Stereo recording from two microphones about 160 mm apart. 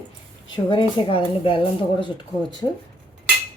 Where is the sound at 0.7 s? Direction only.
30° left (ahead or behind).